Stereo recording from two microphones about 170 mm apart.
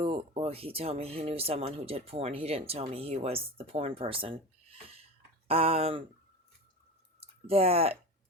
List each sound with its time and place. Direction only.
0.0 s speech: 35° right (ahead or behind)
7.2 s speech: 35° right (ahead or behind)